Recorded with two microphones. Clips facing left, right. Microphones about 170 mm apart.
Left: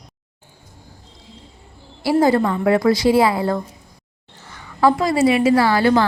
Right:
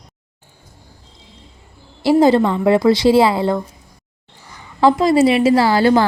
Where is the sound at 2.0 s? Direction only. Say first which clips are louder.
Right 4 dB; 25° right (ahead or behind).